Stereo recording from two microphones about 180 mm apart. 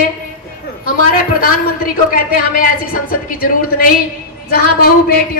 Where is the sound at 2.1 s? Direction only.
50° left (ahead or behind).